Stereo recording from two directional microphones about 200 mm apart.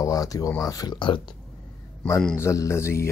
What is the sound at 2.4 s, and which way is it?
Speech, 15° left (ahead or behind).